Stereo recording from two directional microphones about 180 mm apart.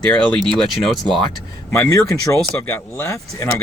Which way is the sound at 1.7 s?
15° left (ahead or behind).